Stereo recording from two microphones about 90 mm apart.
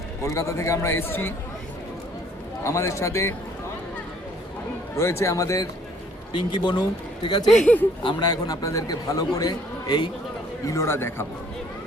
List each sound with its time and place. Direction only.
0.2 s a man's voice: 35° left (ahead or behind)
2.6 s a man's voice: 35° left (ahead or behind)
4.9 s a man's voice: 30° left (ahead or behind)
6.3 s a man's voice: 60° left (ahead or behind)
7.4 s speech: 15° left (ahead or behind)
8.2 s a man's voice: 45° left (ahead or behind)
10.7 s a man's voice: 35° left (ahead or behind)